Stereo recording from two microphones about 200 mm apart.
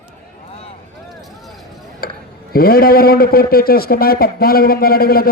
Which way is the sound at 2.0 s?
50° left (ahead or behind).